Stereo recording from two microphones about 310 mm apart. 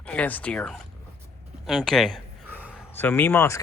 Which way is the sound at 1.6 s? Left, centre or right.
Centre.